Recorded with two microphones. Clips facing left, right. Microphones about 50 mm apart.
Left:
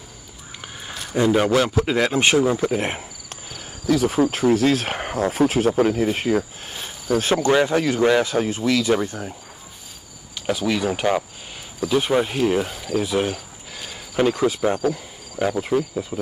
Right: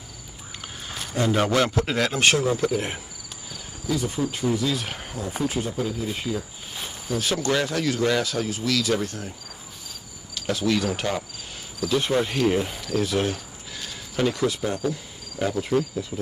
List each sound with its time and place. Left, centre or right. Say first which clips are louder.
1.1 s speech: left 4 dB; centre
2.7 s speech: left 3 dB; left
3.8 s speech: left 8 dB; left
4.6 s speech: left 7 dB; left
5.5 s speech: left 9 dB; left
7.2 s speech: left 6 dB; left
10.3 s speech: left 1 dB; centre
12.4 s speech: left 2 dB; centre
13.0 s speech: left 2 dB; centre
13.7 s a sound: left 5 dB; centre
14.6 s speech: left 6 dB; left
15.3 s speech: left 3 dB; centre